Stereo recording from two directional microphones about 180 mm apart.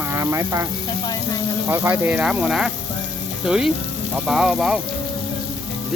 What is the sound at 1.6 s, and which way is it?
Speech, 10° right (ahead or behind).